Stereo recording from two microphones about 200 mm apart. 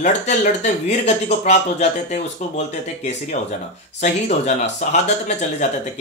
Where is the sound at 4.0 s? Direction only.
35° left (ahead or behind).